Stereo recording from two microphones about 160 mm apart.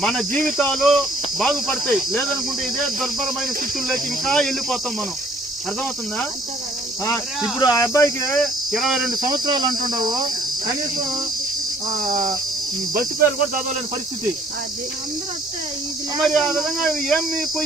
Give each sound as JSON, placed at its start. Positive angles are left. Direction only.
{"t": 0.0, "sound": "speech", "side_deg": 5}
{"t": 7.6, "sound": "speech", "side_deg": 20}
{"t": 8.3, "sound": "speech", "side_deg": 0}
{"t": 9.2, "sound": "cricket", "side_deg": -25}
{"t": 12.9, "sound": "cricket", "side_deg": -65}
{"t": 16.2, "sound": "speech", "side_deg": 0}